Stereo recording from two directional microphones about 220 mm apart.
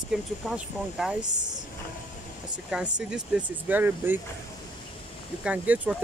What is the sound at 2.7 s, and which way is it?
Speech, 5° right (ahead or behind).